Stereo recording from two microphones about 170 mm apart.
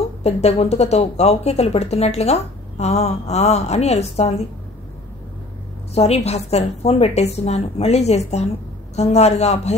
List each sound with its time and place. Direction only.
0.2 s speech: 40° left (ahead or behind)
5.9 s speech: 40° left (ahead or behind)